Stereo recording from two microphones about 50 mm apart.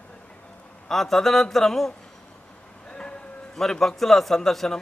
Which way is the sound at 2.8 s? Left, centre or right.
Centre.